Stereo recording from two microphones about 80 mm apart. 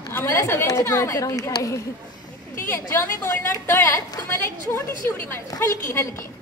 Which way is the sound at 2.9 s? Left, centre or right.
Left.